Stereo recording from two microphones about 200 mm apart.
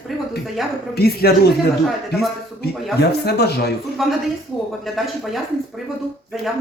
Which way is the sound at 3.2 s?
55° left (ahead or behind).